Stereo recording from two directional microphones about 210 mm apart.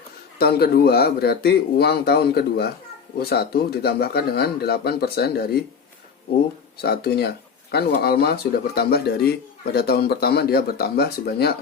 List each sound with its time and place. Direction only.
0.3 s speech: 50° left (ahead or behind)
6.8 s speech: 50° left (ahead or behind)